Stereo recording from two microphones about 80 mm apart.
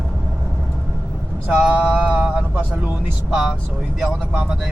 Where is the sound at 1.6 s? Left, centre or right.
Centre.